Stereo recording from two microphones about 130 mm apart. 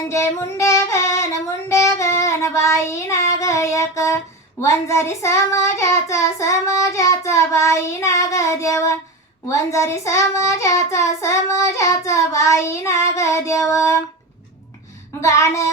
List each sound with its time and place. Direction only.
0.1 s child singing: 20° left (ahead or behind)
15.2 s child singing: 25° left (ahead or behind)